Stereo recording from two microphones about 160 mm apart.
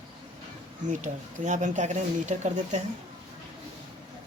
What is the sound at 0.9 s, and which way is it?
Speech, 50° right (ahead or behind).